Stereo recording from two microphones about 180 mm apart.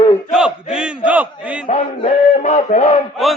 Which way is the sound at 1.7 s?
35° left (ahead or behind).